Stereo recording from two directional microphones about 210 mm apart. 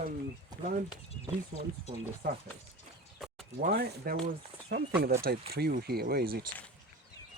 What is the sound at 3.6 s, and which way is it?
Speech, 45° right (ahead or behind).